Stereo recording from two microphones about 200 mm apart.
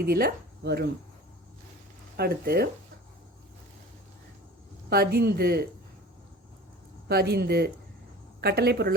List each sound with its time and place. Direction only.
0.0 s speech: 50° right (ahead or behind)
2.1 s speech: 50° right (ahead or behind)
4.9 s speech: 50° right (ahead or behind)
7.1 s a woman's voice: 55° right (ahead or behind)